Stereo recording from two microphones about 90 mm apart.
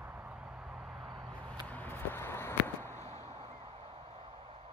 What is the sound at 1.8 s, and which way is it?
Walk, 25° left (ahead or behind).